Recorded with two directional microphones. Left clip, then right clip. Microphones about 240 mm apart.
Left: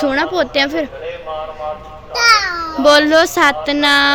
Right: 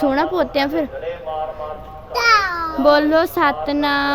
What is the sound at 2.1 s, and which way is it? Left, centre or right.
Speech, centre.